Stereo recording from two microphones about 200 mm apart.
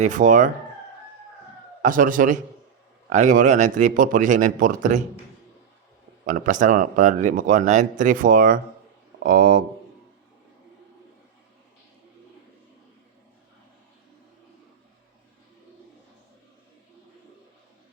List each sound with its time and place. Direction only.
0.0 s speech: 40° right (ahead or behind)
1.8 s a man's voice: 40° right (ahead or behind)
6.2 s a man's voice: 40° right (ahead or behind)